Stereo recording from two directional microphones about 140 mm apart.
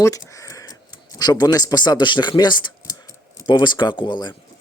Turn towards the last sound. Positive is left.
turn(degrees=35)  # may be behind; listen again after turning